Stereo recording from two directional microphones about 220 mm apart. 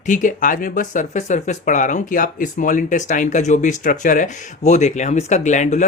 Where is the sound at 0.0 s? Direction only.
35° left (ahead or behind).